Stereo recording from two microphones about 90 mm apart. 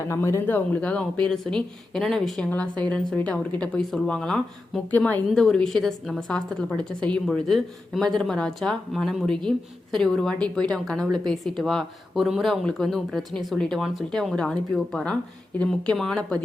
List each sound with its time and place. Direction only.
0.1 s speech: 35° left (ahead or behind)
0.4 s a woman's voice: 20° left (ahead or behind)
4.9 s a woman's voice: 15° left (ahead or behind)
5.4 s a woman's voice: 5° left (ahead or behind)